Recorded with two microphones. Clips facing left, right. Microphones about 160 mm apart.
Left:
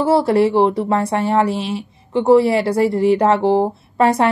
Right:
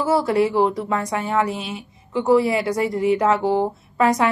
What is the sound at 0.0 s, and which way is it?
Speech, 30° left (ahead or behind).